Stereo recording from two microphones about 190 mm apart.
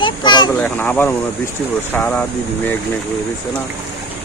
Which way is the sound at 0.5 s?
10° left (ahead or behind).